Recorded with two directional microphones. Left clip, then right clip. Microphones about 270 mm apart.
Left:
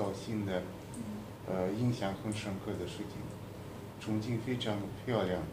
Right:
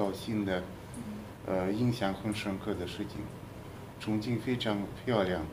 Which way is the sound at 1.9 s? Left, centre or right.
Right.